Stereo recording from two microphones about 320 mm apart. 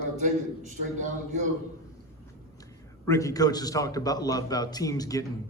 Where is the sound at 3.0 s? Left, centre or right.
Centre.